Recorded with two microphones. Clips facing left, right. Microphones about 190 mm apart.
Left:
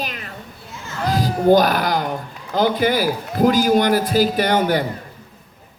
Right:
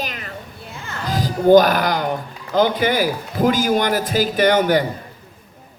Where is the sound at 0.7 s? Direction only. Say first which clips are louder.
Left 3 dB; 60° right (ahead or behind).